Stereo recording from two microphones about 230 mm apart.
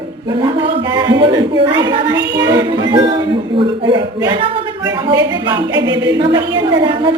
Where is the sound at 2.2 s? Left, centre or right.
Right.